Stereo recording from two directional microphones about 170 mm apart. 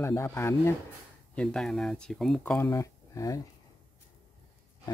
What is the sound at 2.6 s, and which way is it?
Speech, 20° left (ahead or behind).